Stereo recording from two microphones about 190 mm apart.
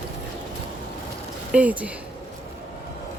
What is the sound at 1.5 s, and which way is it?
Speech, 5° right (ahead or behind).